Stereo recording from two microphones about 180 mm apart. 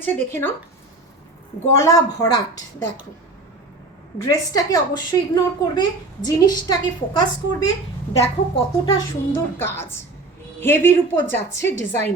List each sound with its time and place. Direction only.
0.0 s a woman's voice: 10° left (ahead or behind)
1.8 s a woman's voice: 20° left (ahead or behind)
4.2 s a woman's voice: 20° left (ahead or behind)
8.1 s a woman's voice: 35° left (ahead or behind)
8.9 s a woman's voice: 10° left (ahead or behind)